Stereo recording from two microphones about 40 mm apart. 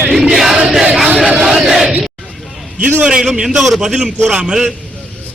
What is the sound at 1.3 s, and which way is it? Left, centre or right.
Battle cry, centre.